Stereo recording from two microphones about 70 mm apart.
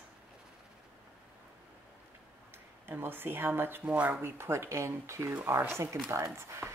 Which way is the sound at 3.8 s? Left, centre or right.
Right.